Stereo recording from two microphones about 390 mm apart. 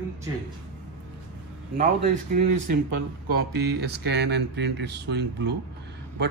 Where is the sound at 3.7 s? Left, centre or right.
Right.